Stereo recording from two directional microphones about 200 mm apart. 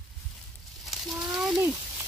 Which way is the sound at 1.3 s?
5° right (ahead or behind).